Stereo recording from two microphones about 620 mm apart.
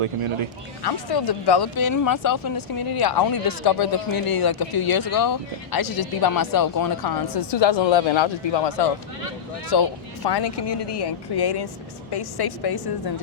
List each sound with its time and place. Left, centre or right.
0.0 s speech: right
0.8 s speech: left